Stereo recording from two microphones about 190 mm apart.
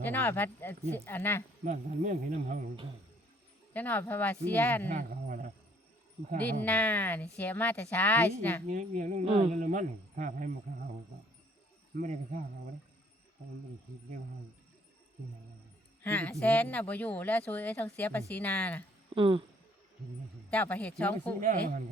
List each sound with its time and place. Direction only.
0.0 s speech: 10° left (ahead or behind)
1.6 s speech: 40° right (ahead or behind)
3.7 s speech: 10° left (ahead or behind)
4.9 s speech: 45° right (ahead or behind)
6.4 s speech: 10° left (ahead or behind)
8.6 s speech: 40° right (ahead or behind)
9.6 s a man's voice: 40° right (ahead or behind)
11.9 s a man's voice: 50° right (ahead or behind)
16.0 s speech: 10° left (ahead or behind)
19.1 s speech: 25° right (ahead or behind)
20.5 s speech: 10° left (ahead or behind)
21.4 s a man's voice: 45° right (ahead or behind)